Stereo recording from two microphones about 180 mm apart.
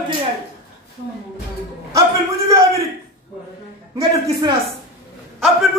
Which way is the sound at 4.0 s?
25° right (ahead or behind).